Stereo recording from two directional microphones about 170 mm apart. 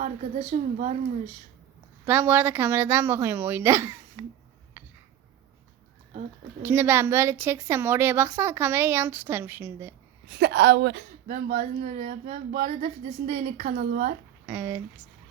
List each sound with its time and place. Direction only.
0.0 s a woman's voice: 45° right (ahead or behind)
2.0 s a woman's voice: 10° right (ahead or behind)
4.8 s a sound: 10° right (ahead or behind)
6.6 s a woman's voice: 15° right (ahead or behind)
10.3 s a woman's voice: 85° right
11.3 s speech: 55° right (ahead or behind)
14.4 s speech: 15° right (ahead or behind)